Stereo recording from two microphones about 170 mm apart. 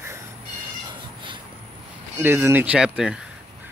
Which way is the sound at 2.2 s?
15° right (ahead or behind).